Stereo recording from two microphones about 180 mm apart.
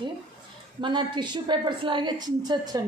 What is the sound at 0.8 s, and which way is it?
Speech, 25° right (ahead or behind).